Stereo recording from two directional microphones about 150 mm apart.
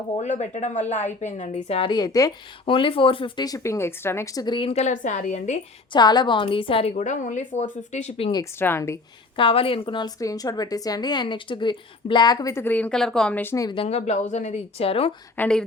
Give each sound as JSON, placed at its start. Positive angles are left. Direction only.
{"t": 0.2, "sound": "a woman's voice", "side_deg": 50}
{"t": 2.6, "sound": "a woman's voice", "side_deg": 35}
{"t": 4.4, "sound": "a woman's voice", "side_deg": 30}
{"t": 4.7, "sound": "speech", "side_deg": 50}
{"t": 5.9, "sound": "a woman's voice", "side_deg": 30}
{"t": 6.9, "sound": "speech", "side_deg": 55}
{"t": 8.5, "sound": "speech", "side_deg": 15}
{"t": 9.3, "sound": "a woman's voice", "side_deg": 35}
{"t": 13.8, "sound": "speech", "side_deg": 50}
{"t": 15.4, "sound": "speech", "side_deg": 5}